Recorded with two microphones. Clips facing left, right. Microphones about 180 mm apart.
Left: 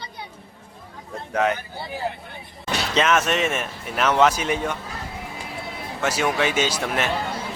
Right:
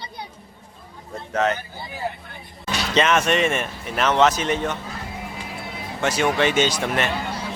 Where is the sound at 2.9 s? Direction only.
Centre (ahead or behind).